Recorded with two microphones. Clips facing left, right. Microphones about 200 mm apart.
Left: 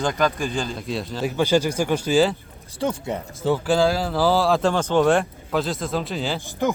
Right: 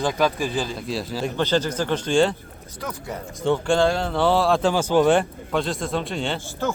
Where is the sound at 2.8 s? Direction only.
25° left (ahead or behind).